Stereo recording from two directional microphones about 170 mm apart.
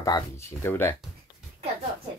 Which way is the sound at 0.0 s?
20° left (ahead or behind).